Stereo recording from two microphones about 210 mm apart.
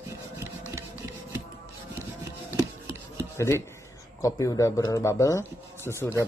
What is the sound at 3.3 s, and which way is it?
Speech, 15° left (ahead or behind).